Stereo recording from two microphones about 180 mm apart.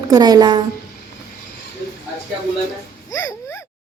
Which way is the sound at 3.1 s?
15° left (ahead or behind).